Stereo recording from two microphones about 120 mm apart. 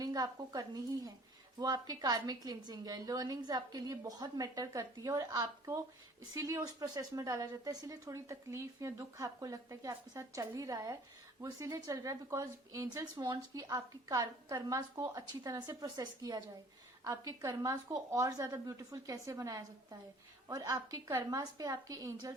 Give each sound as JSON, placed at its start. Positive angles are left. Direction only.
{"t": 0.0, "sound": "a woman's voice", "side_deg": -30}